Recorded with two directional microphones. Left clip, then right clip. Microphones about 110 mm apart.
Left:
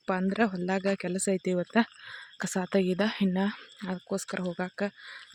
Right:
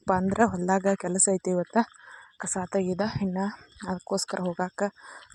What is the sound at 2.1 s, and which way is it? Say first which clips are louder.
Speech: even; 50° left (ahead or behind).